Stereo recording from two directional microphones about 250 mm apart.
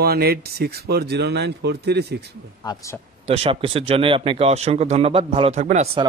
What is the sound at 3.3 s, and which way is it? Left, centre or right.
Speech, right.